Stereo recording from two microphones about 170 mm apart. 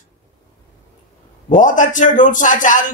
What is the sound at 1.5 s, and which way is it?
Speech, 50° left (ahead or behind).